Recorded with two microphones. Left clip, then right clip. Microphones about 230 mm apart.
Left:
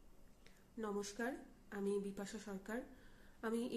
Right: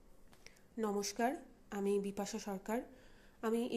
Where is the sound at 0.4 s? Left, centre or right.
Centre.